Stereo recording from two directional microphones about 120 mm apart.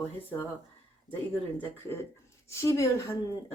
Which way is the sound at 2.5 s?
25° left (ahead or behind).